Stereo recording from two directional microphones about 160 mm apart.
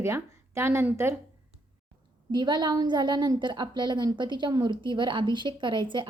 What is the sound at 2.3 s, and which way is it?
A woman's voice, 30° right (ahead or behind).